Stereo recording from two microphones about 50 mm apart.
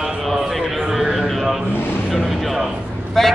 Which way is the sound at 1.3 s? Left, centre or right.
Centre.